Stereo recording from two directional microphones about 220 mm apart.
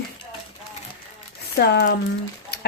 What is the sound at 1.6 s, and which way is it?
Speech, 45° left (ahead or behind).